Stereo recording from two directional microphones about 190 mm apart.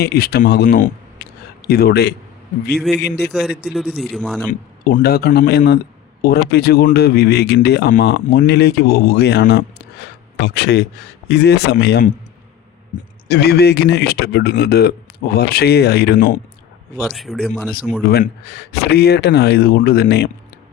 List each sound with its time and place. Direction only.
0.0 s speech: 55° left (ahead or behind)
0.6 s a sound: 50° left (ahead or behind)
2.7 s a man's voice: centre (ahead or behind)
3.0 s speech: 60° left (ahead or behind)
3.7 s a man's voice: centre (ahead or behind)
4.9 s speech: 50° left (ahead or behind)
13.2 s speech: 60° left (ahead or behind)
17.1 s a man's voice: centre (ahead or behind)
18.0 s speech: 55° left (ahead or behind)